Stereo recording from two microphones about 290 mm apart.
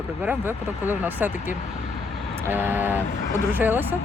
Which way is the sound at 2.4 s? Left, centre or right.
Centre.